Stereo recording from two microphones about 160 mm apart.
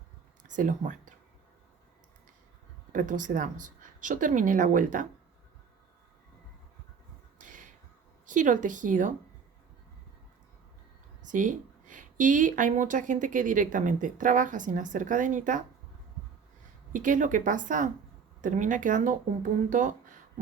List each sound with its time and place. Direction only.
0.4 s speech: 55° right (ahead or behind)
2.9 s speech: 55° right (ahead or behind)
7.3 s a sound: 55° right (ahead or behind)
8.3 s speech: 55° right (ahead or behind)
11.3 s speech: 55° right (ahead or behind)
16.9 s speech: 55° right (ahead or behind)